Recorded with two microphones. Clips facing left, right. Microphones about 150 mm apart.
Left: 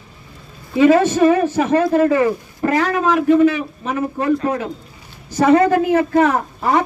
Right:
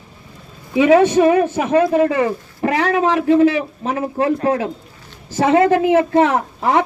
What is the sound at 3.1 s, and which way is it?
A woman's voice, 25° right (ahead or behind).